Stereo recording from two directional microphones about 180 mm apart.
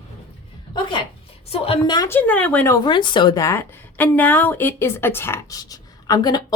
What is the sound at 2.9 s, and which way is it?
A woman's voice, 25° left (ahead or behind).